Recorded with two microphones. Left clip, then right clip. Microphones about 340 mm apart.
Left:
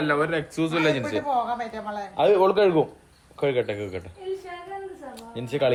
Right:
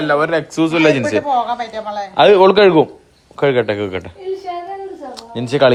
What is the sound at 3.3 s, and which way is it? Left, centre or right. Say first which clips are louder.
Speech: right 10 dB; right.